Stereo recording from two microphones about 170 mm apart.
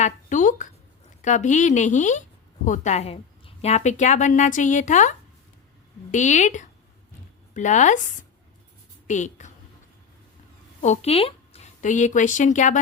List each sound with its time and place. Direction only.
0.0 s a woman's voice: 50° left (ahead or behind)
9.0 s a woman's voice: 45° left (ahead or behind)
10.8 s a woman's voice: 40° left (ahead or behind)